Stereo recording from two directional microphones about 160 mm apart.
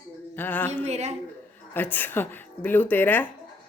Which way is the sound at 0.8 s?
45° right (ahead or behind).